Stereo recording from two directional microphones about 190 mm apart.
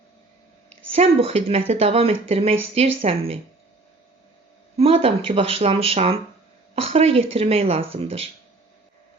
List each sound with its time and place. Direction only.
0.9 s speech: 35° right (ahead or behind)
4.8 s speech: 30° right (ahead or behind)